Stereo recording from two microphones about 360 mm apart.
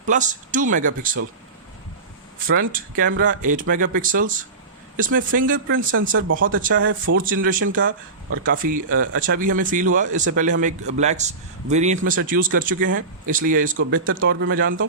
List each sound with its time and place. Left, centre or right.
0.1 s speech: right
2.5 s speech: right